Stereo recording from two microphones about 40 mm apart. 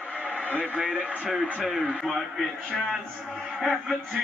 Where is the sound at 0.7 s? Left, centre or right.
Right.